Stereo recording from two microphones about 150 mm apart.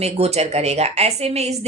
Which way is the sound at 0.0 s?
45° right (ahead or behind).